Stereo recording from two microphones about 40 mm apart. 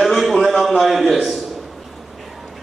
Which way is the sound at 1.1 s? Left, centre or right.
Centre.